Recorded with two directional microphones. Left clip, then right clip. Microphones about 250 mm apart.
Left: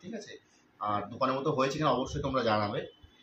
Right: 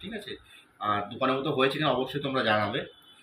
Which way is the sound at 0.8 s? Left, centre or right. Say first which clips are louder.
Right 3 dB; centre.